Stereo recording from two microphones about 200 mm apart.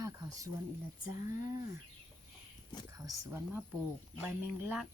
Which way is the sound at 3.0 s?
15° right (ahead or behind).